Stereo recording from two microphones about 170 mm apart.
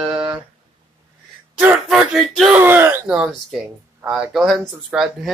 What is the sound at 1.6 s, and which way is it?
Speech, 5° right (ahead or behind).